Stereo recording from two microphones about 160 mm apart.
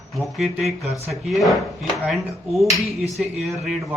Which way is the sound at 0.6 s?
40° right (ahead or behind).